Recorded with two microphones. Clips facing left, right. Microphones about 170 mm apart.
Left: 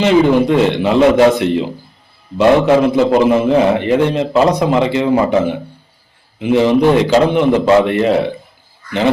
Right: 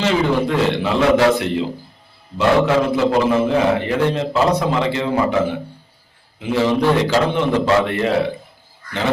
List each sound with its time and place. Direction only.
0.0 s a man's voice: 20° left (ahead or behind)